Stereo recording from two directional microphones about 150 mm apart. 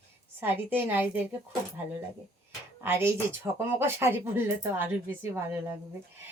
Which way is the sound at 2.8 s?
15° right (ahead or behind).